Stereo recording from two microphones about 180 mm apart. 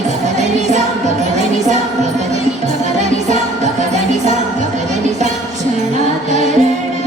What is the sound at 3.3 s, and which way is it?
Music, 40° right (ahead or behind).